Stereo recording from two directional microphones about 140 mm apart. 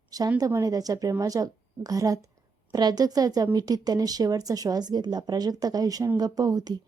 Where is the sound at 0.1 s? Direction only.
25° right (ahead or behind).